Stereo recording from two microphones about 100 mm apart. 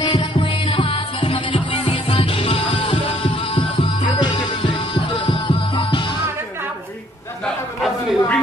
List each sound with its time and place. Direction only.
0.0 s music: 50° left (ahead or behind)
7.4 s chatter: 5° left (ahead or behind)